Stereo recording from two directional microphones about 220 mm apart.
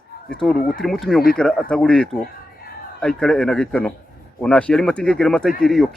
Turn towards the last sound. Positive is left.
turn(degrees=0)  # may be behind; listen again after turning